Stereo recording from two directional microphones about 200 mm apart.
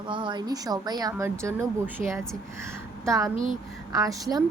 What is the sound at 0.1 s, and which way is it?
A woman's voice, 25° right (ahead or behind).